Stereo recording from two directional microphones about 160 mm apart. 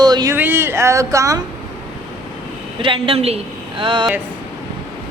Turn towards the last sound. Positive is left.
turn(degrees=-30)  # may be behind; listen again after turning